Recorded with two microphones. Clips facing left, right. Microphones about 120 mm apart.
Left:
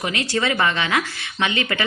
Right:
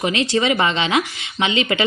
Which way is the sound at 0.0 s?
20° right (ahead or behind).